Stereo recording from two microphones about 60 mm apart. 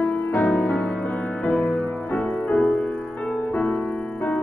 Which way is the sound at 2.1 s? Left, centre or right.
Left.